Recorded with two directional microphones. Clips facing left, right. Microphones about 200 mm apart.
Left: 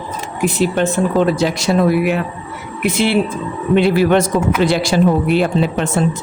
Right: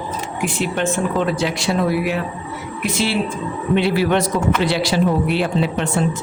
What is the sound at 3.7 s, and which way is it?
Speech, 50° left (ahead or behind).